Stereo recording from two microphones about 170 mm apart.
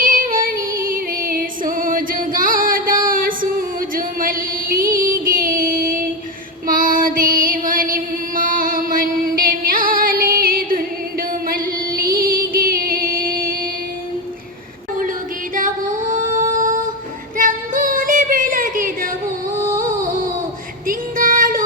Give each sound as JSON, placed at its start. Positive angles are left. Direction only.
{"t": 0.0, "sound": "female singing", "side_deg": -55}
{"t": 11.2, "sound": "music", "side_deg": -55}
{"t": 15.5, "sound": "female singing", "side_deg": -50}
{"t": 17.3, "sound": "music", "side_deg": -50}
{"t": 19.5, "sound": "music", "side_deg": -20}
{"t": 19.8, "sound": "a sound", "side_deg": -50}
{"t": 20.8, "sound": "female singing", "side_deg": -55}